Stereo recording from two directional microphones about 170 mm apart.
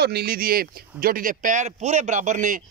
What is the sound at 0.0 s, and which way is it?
Speech, 65° right (ahead or behind).